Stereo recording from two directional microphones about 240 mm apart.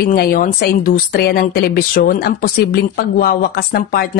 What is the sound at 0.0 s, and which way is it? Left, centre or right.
Speech, left.